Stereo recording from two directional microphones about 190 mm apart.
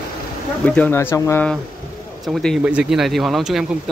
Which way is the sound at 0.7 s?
10° left (ahead or behind).